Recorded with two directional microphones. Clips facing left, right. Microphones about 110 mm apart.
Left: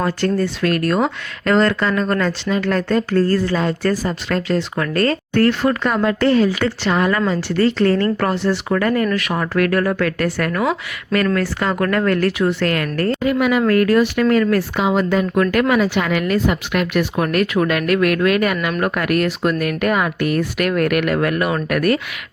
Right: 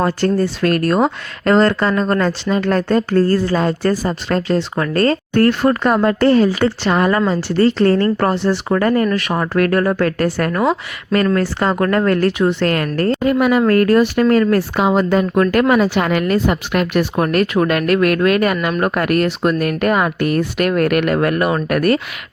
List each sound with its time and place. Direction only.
0.0 s speech: 35° right (ahead or behind)
5.3 s speech: 45° right (ahead or behind)